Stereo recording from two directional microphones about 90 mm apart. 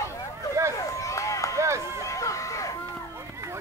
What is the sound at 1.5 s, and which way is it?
Run, 35° right (ahead or behind).